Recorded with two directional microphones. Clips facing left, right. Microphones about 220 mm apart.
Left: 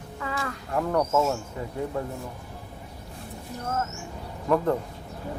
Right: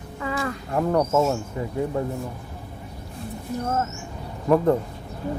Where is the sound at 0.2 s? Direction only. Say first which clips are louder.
Right 5 dB; 15° right (ahead or behind).